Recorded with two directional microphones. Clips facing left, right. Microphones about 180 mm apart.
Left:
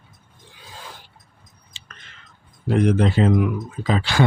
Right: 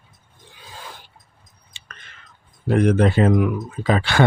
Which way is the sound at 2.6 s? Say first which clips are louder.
Right 2 dB; 55° right (ahead or behind).